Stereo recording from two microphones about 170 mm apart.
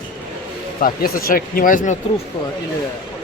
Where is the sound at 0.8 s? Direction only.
55° left (ahead or behind).